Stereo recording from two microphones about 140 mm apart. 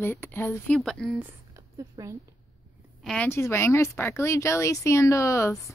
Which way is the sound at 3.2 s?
20° left (ahead or behind).